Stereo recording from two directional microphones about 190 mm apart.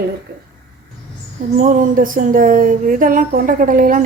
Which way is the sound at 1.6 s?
45° right (ahead or behind).